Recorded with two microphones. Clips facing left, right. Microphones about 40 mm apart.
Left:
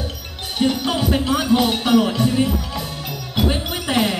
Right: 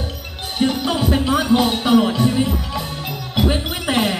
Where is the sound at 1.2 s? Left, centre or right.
Centre.